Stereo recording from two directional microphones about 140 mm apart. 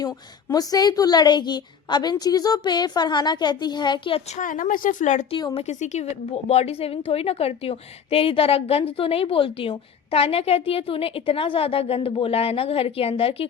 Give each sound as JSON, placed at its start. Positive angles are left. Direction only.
{"t": 0.0, "sound": "a woman's voice", "side_deg": 25}
{"t": 4.3, "sound": "speech", "side_deg": 70}